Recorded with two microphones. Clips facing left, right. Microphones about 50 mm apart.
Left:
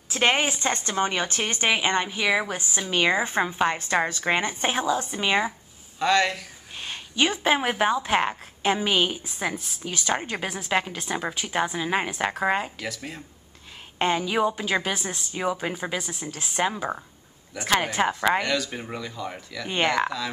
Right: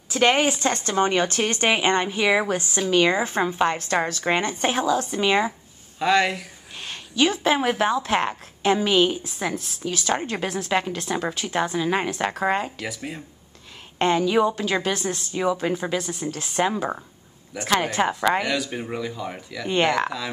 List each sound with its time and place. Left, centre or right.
0.1 s a woman's voice: centre
0.9 s speech: centre
2.5 s a woman's voice: centre
5.9 s speech: centre
7.2 s a woman's voice: left; by 12.8 s centre
12.8 s speech: centre
13.9 s a woman's voice: centre